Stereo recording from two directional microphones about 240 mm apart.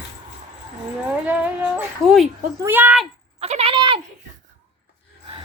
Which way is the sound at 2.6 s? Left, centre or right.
Centre.